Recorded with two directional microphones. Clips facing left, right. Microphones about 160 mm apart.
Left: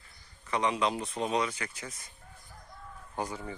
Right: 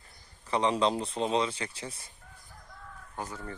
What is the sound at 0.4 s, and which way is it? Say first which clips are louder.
Speech: right 3 dB; 30° right (ahead or behind).